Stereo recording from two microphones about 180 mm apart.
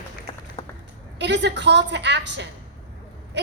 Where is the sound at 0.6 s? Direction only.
25° left (ahead or behind).